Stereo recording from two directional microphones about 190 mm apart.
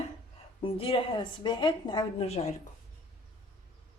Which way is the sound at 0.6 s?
30° left (ahead or behind).